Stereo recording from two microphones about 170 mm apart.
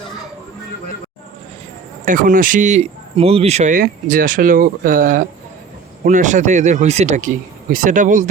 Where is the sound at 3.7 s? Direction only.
55° right (ahead or behind).